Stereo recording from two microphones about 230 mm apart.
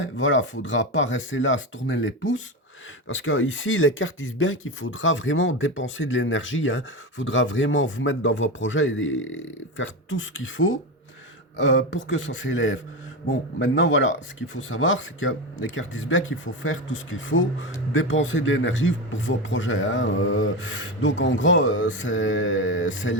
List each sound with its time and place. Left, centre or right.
0.0 s speech: left